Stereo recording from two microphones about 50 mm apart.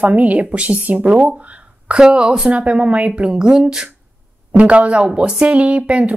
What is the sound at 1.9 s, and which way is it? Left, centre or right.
Speech, centre.